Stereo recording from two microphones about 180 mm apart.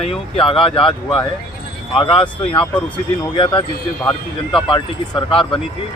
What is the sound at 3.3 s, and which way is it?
Speech, 25° left (ahead or behind).